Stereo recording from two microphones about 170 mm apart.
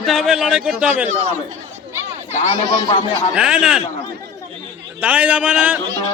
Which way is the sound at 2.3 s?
30° left (ahead or behind).